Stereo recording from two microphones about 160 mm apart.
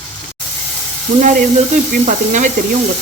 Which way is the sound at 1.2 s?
55° right (ahead or behind).